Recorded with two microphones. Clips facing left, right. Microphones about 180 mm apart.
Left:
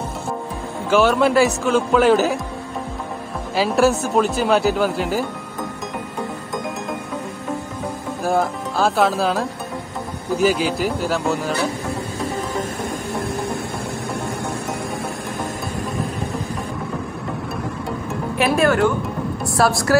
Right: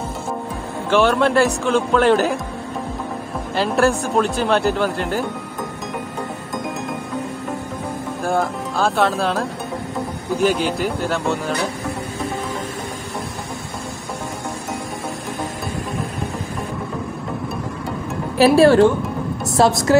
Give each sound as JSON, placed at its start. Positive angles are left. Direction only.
{"t": 0.8, "sound": "speech", "side_deg": 5}
{"t": 3.5, "sound": "speech", "side_deg": 5}
{"t": 8.2, "sound": "speech", "side_deg": 0}
{"t": 18.4, "sound": "speech", "side_deg": -30}